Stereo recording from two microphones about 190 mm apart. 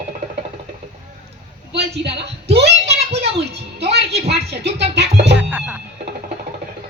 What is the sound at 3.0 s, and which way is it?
Child singing, 35° right (ahead or behind).